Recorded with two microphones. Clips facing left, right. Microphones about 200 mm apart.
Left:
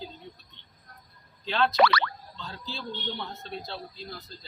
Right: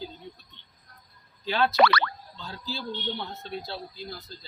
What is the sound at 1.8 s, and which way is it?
Speech, 55° right (ahead or behind).